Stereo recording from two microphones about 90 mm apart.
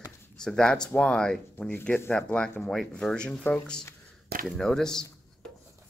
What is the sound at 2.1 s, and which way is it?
Speech, 10° left (ahead or behind).